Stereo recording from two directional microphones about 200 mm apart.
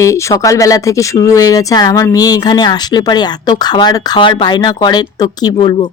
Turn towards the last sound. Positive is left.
turn(degrees=20)  # may be behind; listen again after turning